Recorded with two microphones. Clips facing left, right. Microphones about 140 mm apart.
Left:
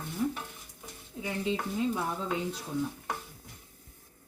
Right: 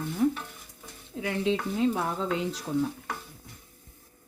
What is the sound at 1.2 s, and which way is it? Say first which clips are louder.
Stir: right 4 dB; 90° right.